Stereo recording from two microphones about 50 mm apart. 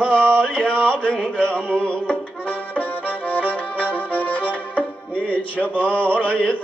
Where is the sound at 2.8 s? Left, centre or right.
Left.